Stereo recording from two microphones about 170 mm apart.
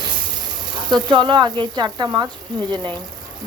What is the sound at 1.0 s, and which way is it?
Speech, 25° right (ahead or behind).